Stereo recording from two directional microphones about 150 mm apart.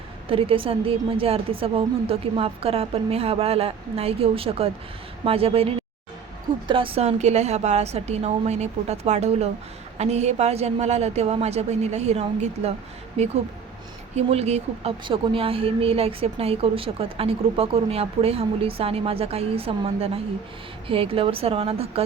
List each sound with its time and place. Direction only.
0.3 s a woman's voice: 35° right (ahead or behind)